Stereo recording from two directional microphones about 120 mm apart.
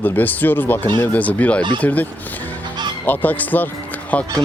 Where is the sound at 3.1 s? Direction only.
15° left (ahead or behind).